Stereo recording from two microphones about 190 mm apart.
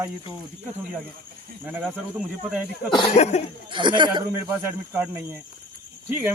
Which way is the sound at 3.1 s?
35° left (ahead or behind).